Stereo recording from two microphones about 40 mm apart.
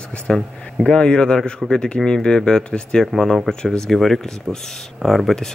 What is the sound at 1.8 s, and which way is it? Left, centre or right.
Speech, left.